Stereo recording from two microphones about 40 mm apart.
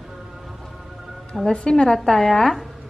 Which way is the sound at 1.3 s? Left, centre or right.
Centre.